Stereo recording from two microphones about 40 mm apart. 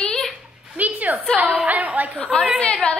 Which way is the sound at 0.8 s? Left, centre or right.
Right.